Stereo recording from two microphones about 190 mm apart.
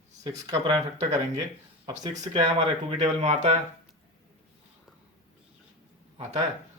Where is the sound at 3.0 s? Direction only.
35° right (ahead or behind).